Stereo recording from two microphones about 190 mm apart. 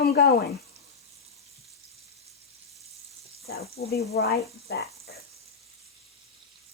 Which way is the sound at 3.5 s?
55° left (ahead or behind).